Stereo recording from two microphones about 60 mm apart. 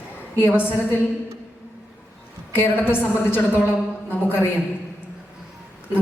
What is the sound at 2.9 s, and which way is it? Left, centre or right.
A woman's voice, left.